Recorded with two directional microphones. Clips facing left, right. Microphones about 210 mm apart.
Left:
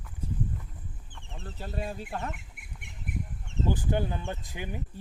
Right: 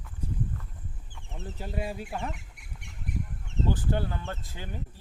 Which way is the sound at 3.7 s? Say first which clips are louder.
Left 2 dB; 15° left (ahead or behind).